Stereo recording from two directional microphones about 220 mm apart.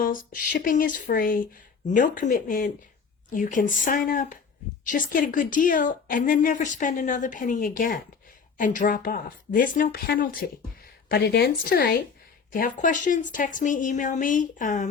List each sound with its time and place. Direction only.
0.0 s a woman's voice: 40° left (ahead or behind)